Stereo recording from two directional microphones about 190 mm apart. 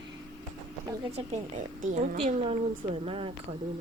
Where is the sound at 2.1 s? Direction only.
30° right (ahead or behind).